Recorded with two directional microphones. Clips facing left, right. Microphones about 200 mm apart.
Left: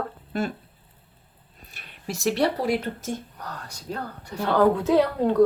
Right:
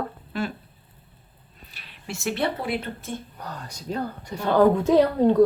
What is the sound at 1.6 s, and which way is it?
Speech, 45° left (ahead or behind).